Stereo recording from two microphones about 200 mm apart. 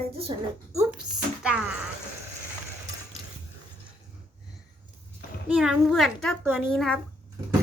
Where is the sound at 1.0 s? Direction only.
5° right (ahead or behind).